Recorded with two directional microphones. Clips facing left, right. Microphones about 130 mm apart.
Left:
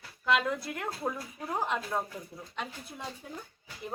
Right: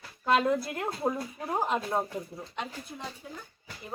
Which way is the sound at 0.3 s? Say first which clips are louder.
Right 4 dB; 35° right (ahead or behind).